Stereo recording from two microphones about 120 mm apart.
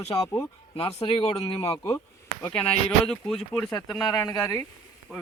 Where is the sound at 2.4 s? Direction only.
10° left (ahead or behind).